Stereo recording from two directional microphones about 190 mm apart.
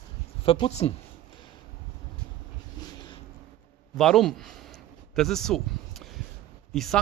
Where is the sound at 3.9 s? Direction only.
Centre (ahead or behind).